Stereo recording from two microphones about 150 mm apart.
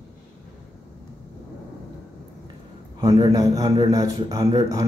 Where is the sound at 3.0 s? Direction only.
25° right (ahead or behind).